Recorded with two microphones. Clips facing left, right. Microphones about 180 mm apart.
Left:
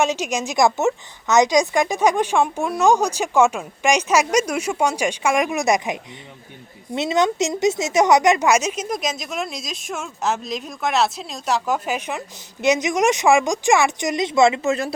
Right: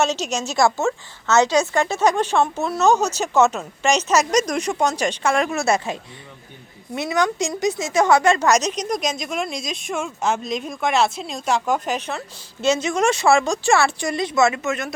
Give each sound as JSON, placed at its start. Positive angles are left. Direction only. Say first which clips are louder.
{"t": 0.0, "sound": "a woman's voice", "louder": "left 1 dB", "side_deg": 10}